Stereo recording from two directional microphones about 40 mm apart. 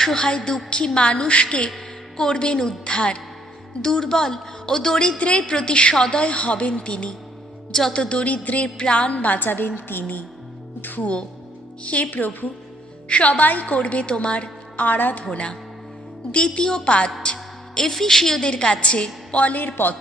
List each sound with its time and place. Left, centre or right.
0.0 s a woman's voice: centre
4.9 s a woman's voice: left
7.7 s a woman's voice: centre
7.9 s a woman's voice: left
8.2 s a woman's voice: left
8.6 s music: left
11.0 s a woman's voice: left
11.8 s music: left
13.1 s a woman's voice: left
14.9 s music: left
15.2 s a woman's voice: left
17.3 s speech: centre
18.4 s a woman's voice: left
19.6 s music: left